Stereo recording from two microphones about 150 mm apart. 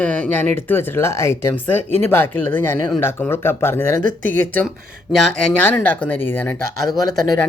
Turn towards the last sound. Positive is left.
turn(degrees=25)  # may be behind; listen again after turning